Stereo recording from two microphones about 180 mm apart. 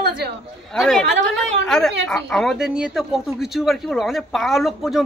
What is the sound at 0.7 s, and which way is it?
Speech, centre (ahead or behind).